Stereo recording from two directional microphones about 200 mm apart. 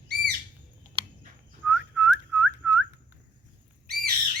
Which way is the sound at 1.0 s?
25° right (ahead or behind).